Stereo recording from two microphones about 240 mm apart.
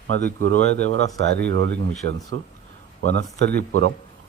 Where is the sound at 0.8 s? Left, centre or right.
Right.